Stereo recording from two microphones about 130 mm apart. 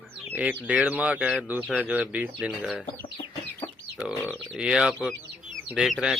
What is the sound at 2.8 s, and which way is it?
Chicken, 40° left (ahead or behind).